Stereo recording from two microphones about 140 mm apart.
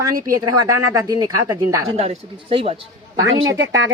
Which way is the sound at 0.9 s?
25° right (ahead or behind).